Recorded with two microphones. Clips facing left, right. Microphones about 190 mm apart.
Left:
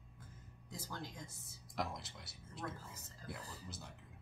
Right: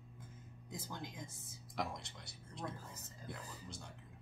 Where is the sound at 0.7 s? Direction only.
15° right (ahead or behind).